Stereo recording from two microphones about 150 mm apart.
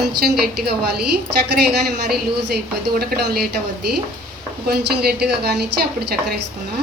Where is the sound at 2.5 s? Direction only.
90° right.